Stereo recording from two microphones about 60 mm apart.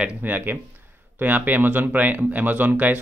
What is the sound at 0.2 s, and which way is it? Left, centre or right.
Speech, right.